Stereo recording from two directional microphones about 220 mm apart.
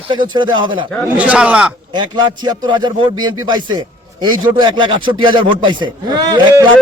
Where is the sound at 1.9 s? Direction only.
20° right (ahead or behind).